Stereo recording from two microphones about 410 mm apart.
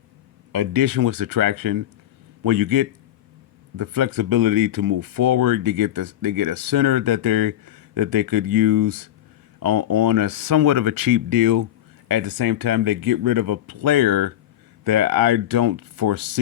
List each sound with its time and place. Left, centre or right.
0.5 s speech: right